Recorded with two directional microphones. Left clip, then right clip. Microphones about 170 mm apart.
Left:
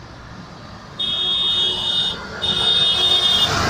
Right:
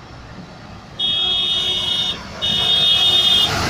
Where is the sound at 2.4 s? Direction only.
15° left (ahead or behind).